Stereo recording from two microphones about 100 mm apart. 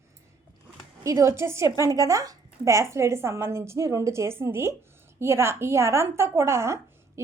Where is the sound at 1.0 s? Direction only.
30° right (ahead or behind).